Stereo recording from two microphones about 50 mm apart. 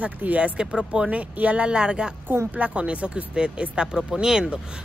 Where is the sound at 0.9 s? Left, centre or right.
Centre.